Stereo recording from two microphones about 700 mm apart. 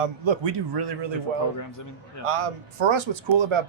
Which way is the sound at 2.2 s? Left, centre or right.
Right.